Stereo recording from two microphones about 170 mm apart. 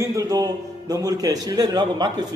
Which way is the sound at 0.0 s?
20° right (ahead or behind).